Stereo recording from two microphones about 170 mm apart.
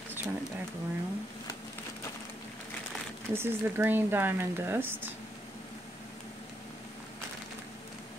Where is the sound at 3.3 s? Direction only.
15° right (ahead or behind).